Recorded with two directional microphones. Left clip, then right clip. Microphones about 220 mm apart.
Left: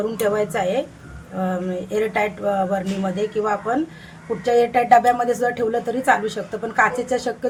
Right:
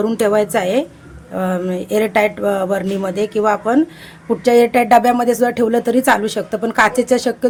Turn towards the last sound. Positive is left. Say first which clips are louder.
# right 7 dB
turn(degrees=-45)  # may be behind; listen again after turning